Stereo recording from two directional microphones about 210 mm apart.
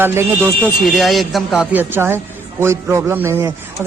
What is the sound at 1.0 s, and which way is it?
Speech, centre (ahead or behind).